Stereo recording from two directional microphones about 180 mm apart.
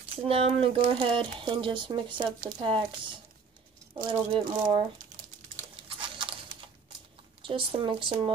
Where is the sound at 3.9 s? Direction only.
25° right (ahead or behind).